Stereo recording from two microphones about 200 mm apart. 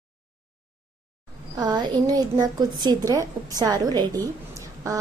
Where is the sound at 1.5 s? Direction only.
20° right (ahead or behind).